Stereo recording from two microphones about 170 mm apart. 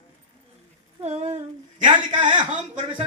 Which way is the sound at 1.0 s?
40° right (ahead or behind).